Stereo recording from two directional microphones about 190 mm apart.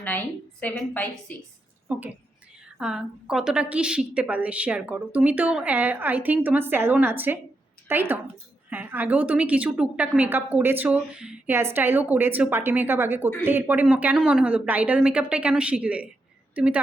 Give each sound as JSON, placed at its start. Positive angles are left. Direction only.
{"t": 0.6, "sound": "a woman's voice", "side_deg": 10}
{"t": 1.9, "sound": "a woman's voice", "side_deg": -5}